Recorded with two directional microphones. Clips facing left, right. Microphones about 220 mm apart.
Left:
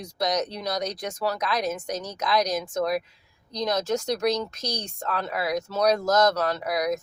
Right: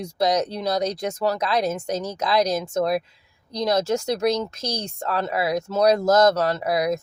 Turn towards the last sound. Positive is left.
turn(degrees=-25)  # may be behind; listen again after turning